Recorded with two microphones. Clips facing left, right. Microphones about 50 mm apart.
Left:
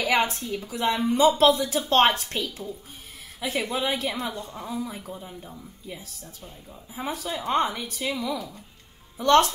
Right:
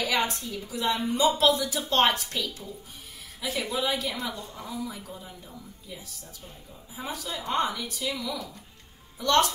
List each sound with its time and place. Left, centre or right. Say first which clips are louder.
0.0 s speech: left 4 dB; left
7.0 s speech: left 4 dB; left